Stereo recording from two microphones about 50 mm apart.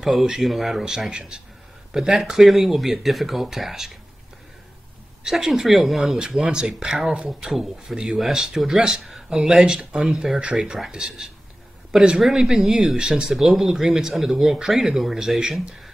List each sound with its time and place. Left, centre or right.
0.0 s speech: centre
2.0 s speech: centre
5.2 s speech: centre
6.5 s speech: centre
7.9 s speech: centre
10.4 s a man's voice: centre
12.2 s speech: centre
13.3 s speech: centre